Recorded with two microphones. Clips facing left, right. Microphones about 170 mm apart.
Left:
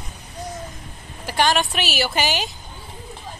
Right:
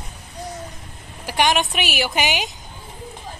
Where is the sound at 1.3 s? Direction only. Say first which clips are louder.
Even; 15° right (ahead or behind).